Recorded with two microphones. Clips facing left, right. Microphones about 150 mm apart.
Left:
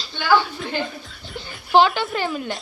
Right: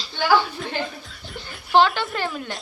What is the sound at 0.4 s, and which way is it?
A woman's voice, centre (ahead or behind).